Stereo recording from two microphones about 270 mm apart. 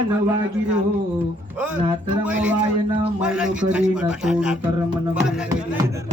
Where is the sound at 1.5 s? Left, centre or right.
Centre.